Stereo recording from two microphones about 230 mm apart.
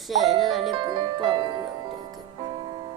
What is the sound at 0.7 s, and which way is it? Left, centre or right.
Speech, right.